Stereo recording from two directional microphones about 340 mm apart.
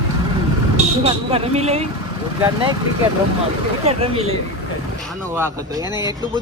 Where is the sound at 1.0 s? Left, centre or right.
Centre.